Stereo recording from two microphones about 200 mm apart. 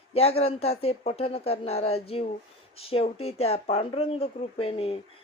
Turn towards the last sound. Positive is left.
turn(degrees=30)  # may be behind; listen again after turning